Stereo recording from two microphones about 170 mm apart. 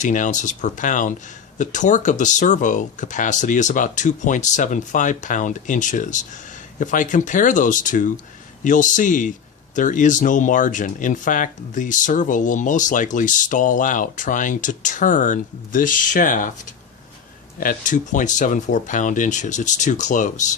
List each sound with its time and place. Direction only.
0.0 s speech: 50° left (ahead or behind)